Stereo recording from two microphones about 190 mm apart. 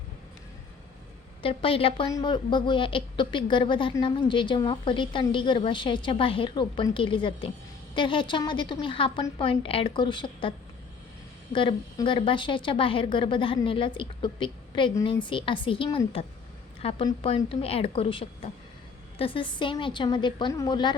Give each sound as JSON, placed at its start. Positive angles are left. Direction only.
{"t": 1.4, "sound": "a woman's voice", "side_deg": 30}
{"t": 11.5, "sound": "a woman's voice", "side_deg": 25}